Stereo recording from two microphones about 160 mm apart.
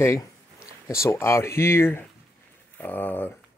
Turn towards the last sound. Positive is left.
turn(degrees=10)  # may be behind; listen again after turning